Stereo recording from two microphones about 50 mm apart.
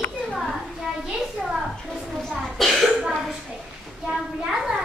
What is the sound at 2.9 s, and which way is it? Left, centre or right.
Cough, centre.